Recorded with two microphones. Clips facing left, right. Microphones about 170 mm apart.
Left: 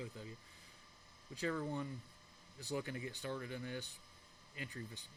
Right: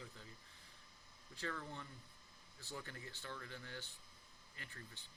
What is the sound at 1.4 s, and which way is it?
Speech, 15° left (ahead or behind).